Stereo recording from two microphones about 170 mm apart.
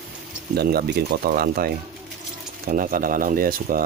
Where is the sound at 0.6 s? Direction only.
65° right (ahead or behind).